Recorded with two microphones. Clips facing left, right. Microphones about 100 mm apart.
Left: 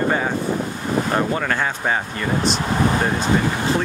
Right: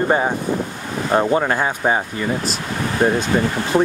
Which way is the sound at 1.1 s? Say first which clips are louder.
Right 8 dB; 20° right (ahead or behind).